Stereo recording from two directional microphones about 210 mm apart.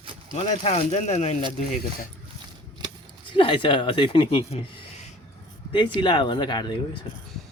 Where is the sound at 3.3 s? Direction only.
25° left (ahead or behind).